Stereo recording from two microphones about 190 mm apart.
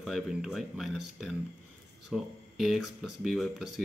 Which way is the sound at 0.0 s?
Centre (ahead or behind).